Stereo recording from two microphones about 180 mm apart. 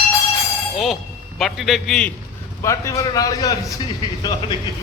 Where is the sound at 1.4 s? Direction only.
Centre (ahead or behind).